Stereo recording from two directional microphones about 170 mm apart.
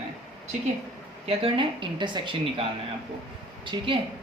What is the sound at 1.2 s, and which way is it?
Speech, 30° right (ahead or behind).